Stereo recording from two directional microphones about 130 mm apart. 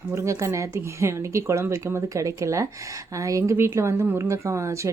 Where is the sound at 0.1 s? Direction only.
20° right (ahead or behind).